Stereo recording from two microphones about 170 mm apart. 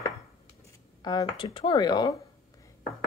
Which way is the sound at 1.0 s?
25° left (ahead or behind).